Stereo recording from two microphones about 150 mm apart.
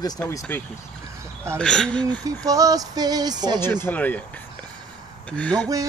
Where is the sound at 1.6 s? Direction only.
5° left (ahead or behind).